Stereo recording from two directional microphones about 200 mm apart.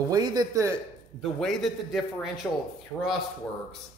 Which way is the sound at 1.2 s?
Centre (ahead or behind).